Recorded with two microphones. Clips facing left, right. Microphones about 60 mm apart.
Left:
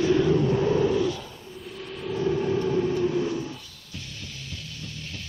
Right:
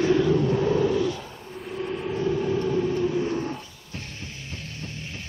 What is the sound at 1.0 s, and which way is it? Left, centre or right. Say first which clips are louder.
Roar: even; right.